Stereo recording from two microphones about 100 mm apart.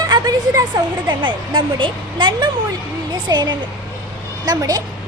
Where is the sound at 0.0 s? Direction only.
40° right (ahead or behind).